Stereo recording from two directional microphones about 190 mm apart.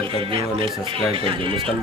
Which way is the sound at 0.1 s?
30° right (ahead or behind).